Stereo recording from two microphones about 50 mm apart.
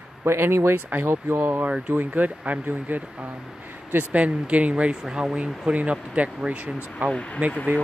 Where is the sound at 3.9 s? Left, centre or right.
Right.